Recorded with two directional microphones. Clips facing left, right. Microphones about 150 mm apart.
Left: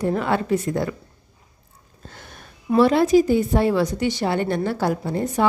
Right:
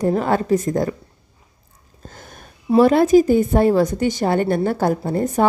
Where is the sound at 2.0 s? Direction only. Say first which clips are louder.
Right 2 dB; 45° right (ahead or behind).